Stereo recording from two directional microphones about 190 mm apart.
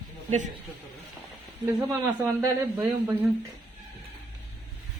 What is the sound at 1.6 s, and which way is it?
Speech, 10° right (ahead or behind).